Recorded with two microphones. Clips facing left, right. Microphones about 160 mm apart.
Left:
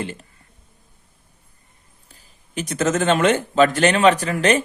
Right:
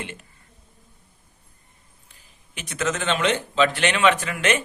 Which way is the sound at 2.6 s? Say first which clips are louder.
Left 6 dB; 40° left (ahead or behind).